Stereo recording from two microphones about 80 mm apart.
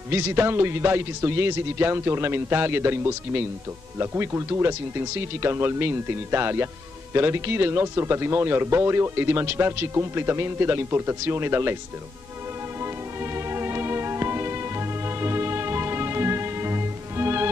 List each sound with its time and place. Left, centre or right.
0.1 s speech: right
12.8 s music: right